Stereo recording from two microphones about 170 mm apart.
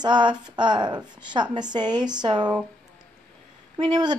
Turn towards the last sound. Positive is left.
turn(degrees=-25)  # may be behind; listen again after turning